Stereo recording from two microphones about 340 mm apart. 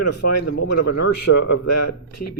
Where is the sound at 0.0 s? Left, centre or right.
Left.